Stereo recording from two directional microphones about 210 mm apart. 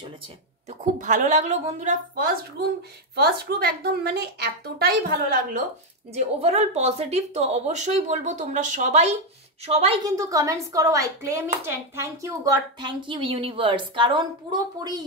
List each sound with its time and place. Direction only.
0.7 s speech: 35° right (ahead or behind)
3.2 s a woman's voice: 50° right (ahead or behind)
6.1 s a woman's voice: 30° right (ahead or behind)
10.0 s speech: 15° right (ahead or behind)